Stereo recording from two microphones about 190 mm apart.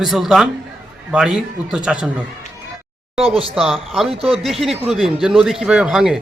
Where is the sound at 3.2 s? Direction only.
30° right (ahead or behind).